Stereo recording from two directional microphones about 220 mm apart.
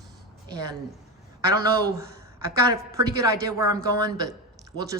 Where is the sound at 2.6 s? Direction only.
15° right (ahead or behind).